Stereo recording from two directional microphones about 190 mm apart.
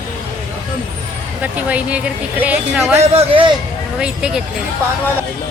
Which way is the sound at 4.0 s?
5° right (ahead or behind).